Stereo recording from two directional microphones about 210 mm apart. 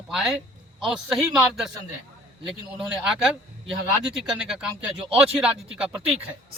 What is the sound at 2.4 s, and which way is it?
Speech, 5° right (ahead or behind).